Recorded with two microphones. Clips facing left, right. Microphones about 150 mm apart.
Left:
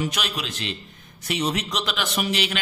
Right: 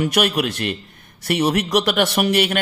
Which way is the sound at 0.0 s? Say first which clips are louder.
Right 9 dB; 60° right (ahead or behind).